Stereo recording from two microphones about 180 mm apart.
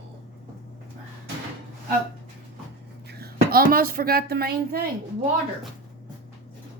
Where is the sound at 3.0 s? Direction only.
60° right (ahead or behind).